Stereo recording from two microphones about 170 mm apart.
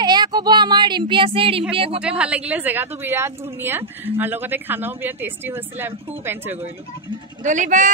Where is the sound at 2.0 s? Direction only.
5° right (ahead or behind).